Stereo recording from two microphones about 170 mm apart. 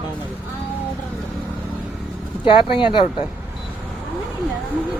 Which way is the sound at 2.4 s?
30° left (ahead or behind).